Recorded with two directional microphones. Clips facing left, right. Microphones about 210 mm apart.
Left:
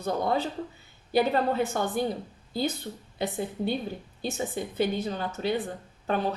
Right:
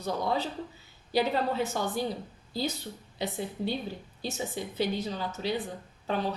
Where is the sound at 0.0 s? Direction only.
55° left (ahead or behind).